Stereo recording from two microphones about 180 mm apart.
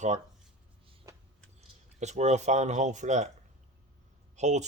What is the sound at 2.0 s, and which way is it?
Speech, 40° right (ahead or behind).